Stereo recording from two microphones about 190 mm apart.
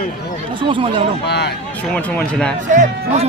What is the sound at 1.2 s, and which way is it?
Speech, 60° left (ahead or behind).